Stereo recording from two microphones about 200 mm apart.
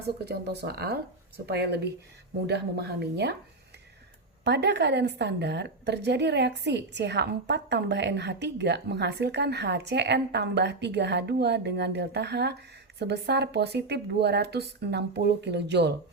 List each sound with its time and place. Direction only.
0.3 s a woman's voice: 55° right (ahead or behind)
4.4 s a woman's voice: 55° right (ahead or behind)